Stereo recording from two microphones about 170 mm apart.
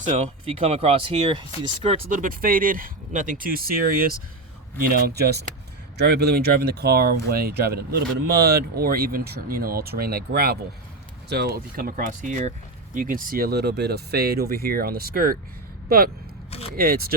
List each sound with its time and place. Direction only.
0.2 s speech: 35° right (ahead or behind)
2.0 s speech: 55° right (ahead or behind)
16.5 s a sound: 35° left (ahead or behind)
16.7 s speech: 60° right (ahead or behind)